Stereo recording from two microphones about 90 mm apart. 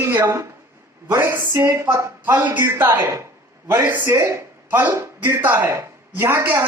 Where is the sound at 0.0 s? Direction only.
25° right (ahead or behind).